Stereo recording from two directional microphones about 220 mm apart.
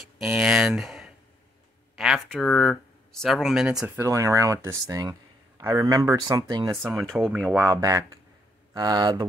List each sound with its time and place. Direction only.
0.2 s speech: centre (ahead or behind)
3.8 s speech: 10° right (ahead or behind)
6.8 s speech: centre (ahead or behind)
7.6 s speech: 15° right (ahead or behind)